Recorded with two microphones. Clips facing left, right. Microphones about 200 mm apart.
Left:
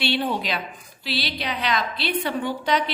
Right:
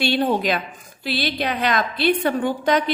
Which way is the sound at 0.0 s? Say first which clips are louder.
Right 5 dB; 45° right (ahead or behind).